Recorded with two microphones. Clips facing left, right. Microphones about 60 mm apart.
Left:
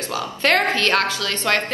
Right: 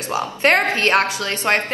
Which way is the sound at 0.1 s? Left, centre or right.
Right.